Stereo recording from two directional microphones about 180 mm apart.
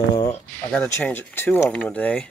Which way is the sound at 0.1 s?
20° left (ahead or behind).